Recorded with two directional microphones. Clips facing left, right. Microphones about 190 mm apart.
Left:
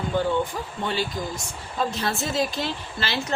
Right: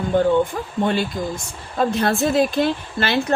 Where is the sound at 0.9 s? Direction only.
55° right (ahead or behind).